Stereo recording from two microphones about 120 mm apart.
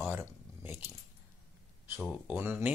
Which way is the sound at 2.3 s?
15° right (ahead or behind).